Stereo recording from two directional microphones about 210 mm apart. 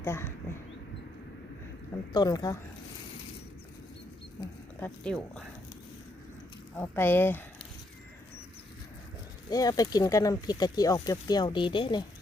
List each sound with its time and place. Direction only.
0.0 s speech: 10° left (ahead or behind)
2.1 s speech: 20° left (ahead or behind)
4.8 s speech: 5° left (ahead or behind)
6.7 s speech: 10° left (ahead or behind)
9.5 s speech: 15° left (ahead or behind)